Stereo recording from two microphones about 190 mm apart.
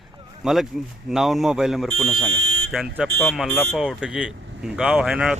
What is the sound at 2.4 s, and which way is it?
Fire alarm, 90° right.